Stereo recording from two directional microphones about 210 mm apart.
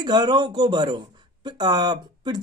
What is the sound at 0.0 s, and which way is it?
Speech, 20° right (ahead or behind).